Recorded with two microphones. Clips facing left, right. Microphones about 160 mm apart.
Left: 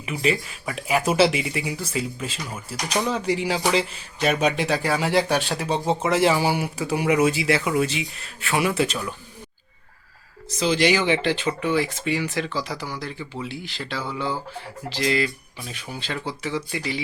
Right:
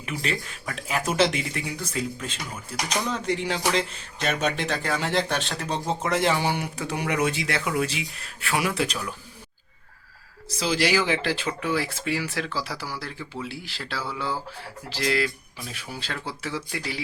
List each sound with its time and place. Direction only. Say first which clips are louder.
0.0 s speech: left 6 dB; 5° left (ahead or behind)
10.6 s speech: left 3 dB; centre (ahead or behind)